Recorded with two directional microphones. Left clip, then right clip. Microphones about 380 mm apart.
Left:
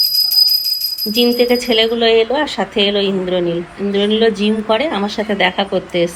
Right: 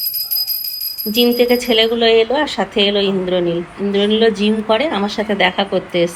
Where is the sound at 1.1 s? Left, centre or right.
Centre.